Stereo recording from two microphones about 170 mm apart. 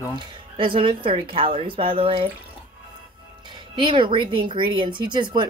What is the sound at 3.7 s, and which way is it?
Speech, 30° right (ahead or behind).